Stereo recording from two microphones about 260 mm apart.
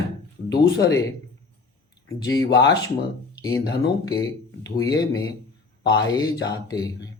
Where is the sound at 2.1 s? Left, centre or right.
Centre.